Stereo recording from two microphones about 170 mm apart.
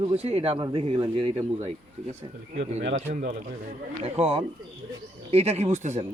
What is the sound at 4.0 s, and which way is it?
A man's voice, 35° right (ahead or behind).